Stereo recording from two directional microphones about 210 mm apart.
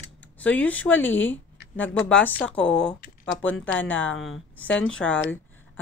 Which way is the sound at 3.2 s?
65° left (ahead or behind).